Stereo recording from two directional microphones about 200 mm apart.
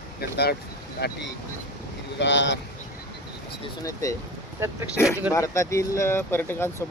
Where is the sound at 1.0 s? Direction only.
55° left (ahead or behind).